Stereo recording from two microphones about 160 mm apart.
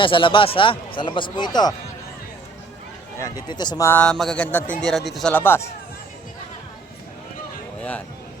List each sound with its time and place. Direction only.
0.0 s speech: 30° left (ahead or behind)
3.2 s speech: 25° left (ahead or behind)
3.8 s a man's voice: 10° left (ahead or behind)
5.3 s speech: 15° left (ahead or behind)
7.8 s a sound: 10° left (ahead or behind)